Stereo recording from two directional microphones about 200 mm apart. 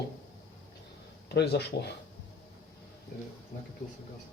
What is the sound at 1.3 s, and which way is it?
Speech, 55° left (ahead or behind).